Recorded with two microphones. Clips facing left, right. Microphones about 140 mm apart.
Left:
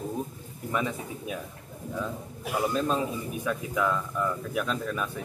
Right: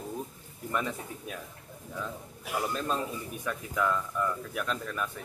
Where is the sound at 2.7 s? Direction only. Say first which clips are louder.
Left 5 dB; 5° left (ahead or behind).